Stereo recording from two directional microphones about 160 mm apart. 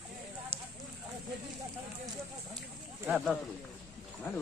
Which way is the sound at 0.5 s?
40° right (ahead or behind).